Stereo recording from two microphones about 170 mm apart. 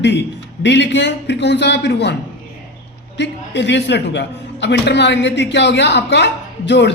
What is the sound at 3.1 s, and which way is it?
A woman's voice, 90° left.